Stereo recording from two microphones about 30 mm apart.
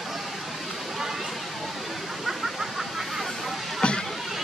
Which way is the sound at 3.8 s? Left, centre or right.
Left.